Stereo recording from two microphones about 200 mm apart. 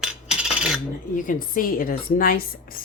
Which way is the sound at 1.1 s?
45° left (ahead or behind).